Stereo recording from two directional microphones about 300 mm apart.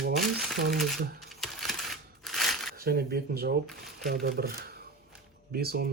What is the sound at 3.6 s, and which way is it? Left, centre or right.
Shuffling cards, centre.